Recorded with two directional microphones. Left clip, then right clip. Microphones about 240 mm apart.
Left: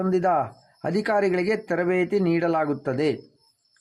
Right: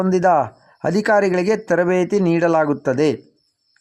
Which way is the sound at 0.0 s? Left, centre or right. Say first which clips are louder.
Right 6 dB; right.